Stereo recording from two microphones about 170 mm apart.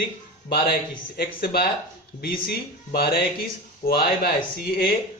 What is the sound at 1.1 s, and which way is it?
Speech, 65° left (ahead or behind).